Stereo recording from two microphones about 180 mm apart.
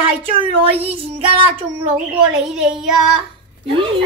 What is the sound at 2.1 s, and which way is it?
Speech, 5° right (ahead or behind).